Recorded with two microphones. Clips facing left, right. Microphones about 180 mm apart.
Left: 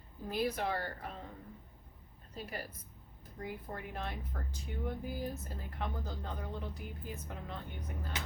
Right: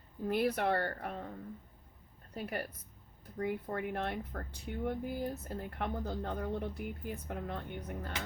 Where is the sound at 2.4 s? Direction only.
60° right (ahead or behind).